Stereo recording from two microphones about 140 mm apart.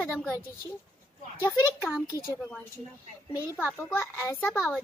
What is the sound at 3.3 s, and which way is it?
A child's voice, 20° left (ahead or behind).